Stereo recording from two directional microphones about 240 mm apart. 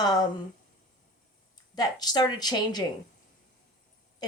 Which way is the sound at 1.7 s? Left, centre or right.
Centre.